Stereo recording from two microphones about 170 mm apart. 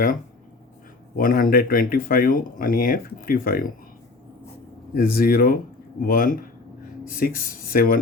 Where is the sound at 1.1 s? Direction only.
55° left (ahead or behind).